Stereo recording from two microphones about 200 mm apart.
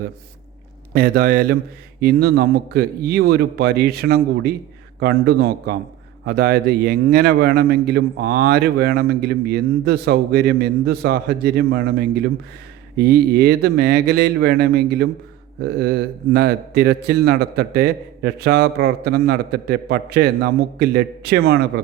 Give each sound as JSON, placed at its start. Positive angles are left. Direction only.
{"t": 0.9, "sound": "a man's voice", "side_deg": -50}